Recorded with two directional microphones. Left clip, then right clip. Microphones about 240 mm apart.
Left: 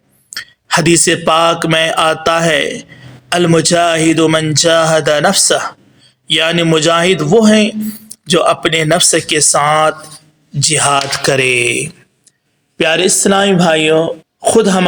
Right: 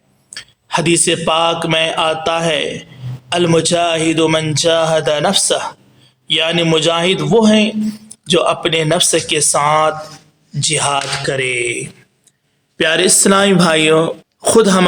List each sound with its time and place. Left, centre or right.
0.3 s a man's voice: centre
12.7 s speech: centre